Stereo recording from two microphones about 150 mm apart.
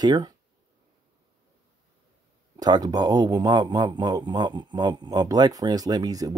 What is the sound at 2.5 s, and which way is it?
Speech, 25° right (ahead or behind).